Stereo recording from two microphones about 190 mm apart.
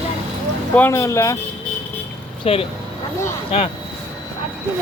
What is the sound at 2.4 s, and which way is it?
Speech, 30° left (ahead or behind).